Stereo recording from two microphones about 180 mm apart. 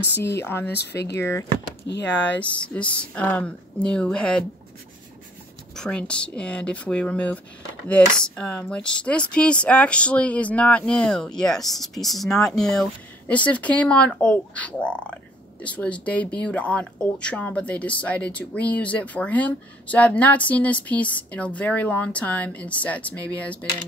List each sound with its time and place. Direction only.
0.4 s speech: 10° left (ahead or behind)
0.7 s speech: 70° left (ahead or behind)
1.1 s speech: 15° left (ahead or behind)
1.9 s speech: 75° left (ahead or behind)
2.2 s speech: 10° left (ahead or behind)
5.8 s speech: 5° left (ahead or behind)
8.4 s speech: 5° left (ahead or behind)